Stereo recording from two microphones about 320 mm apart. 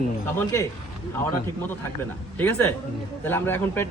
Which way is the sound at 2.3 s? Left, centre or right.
Centre.